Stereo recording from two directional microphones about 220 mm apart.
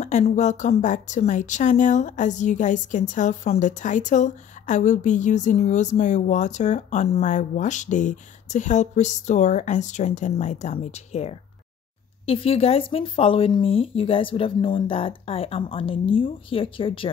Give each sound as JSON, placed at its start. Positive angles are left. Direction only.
{"t": 0.0, "sound": "speech", "side_deg": 30}